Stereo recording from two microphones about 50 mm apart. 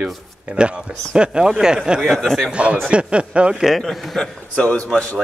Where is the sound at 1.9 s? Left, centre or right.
Centre.